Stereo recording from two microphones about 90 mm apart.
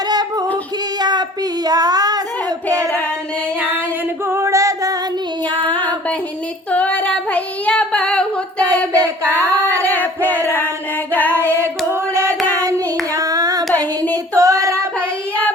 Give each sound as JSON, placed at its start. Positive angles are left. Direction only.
{"t": 0.1, "sound": "singing", "side_deg": -50}
{"t": 0.9, "sound": "female singing", "side_deg": -50}
{"t": 1.6, "sound": "child singing", "side_deg": -45}
{"t": 4.3, "sound": "singing", "side_deg": -30}
{"t": 5.5, "sound": "child singing", "side_deg": -65}
{"t": 6.7, "sound": "child singing", "side_deg": 15}
{"t": 9.0, "sound": "a sound", "side_deg": -30}
{"t": 9.8, "sound": "a sound", "side_deg": 20}
{"t": 11.1, "sound": "female singing", "side_deg": 20}
{"t": 11.9, "sound": "singing", "side_deg": -30}
{"t": 12.5, "sound": "hands", "side_deg": -40}
{"t": 14.3, "sound": "female singing", "side_deg": -35}